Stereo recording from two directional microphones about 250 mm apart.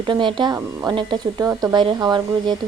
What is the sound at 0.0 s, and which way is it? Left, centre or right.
Speech, centre.